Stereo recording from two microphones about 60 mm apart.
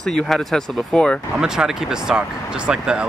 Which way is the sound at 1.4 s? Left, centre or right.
Centre.